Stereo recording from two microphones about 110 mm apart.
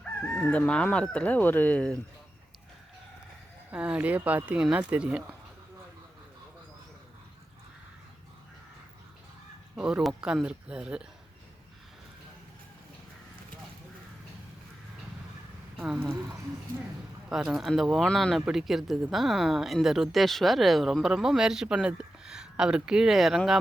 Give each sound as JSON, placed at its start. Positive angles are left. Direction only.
{"t": 0.3, "sound": "speech", "side_deg": 10}
{"t": 3.7, "sound": "speech", "side_deg": -10}
{"t": 9.7, "sound": "speech", "side_deg": -10}
{"t": 15.8, "sound": "speech", "side_deg": -15}
{"t": 17.2, "sound": "speech", "side_deg": -5}